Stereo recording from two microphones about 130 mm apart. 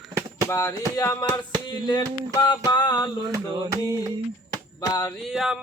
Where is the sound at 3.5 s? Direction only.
30° right (ahead or behind).